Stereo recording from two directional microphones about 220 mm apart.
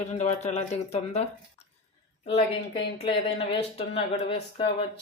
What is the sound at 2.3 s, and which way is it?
Speech, 30° left (ahead or behind).